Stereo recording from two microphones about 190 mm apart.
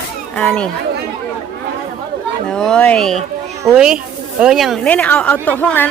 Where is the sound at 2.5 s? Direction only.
5° left (ahead or behind).